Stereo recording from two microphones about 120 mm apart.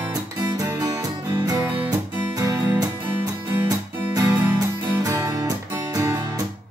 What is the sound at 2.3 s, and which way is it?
Music, 25° right (ahead or behind).